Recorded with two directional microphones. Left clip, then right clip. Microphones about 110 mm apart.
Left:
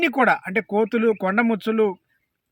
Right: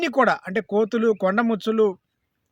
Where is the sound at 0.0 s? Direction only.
40° right (ahead or behind).